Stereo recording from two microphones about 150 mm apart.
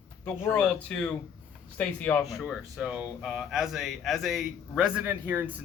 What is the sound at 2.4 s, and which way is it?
Speech, centre (ahead or behind).